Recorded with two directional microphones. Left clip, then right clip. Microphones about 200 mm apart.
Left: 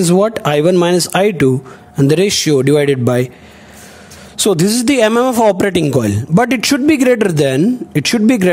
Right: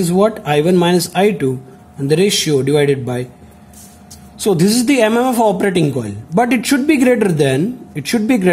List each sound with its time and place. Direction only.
0.0 s a man's voice: 55° left (ahead or behind)
4.4 s a man's voice: 55° left (ahead or behind)